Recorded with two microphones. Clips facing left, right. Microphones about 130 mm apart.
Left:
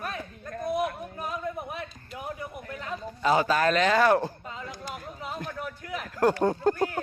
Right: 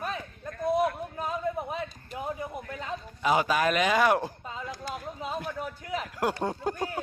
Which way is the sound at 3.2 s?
10° right (ahead or behind).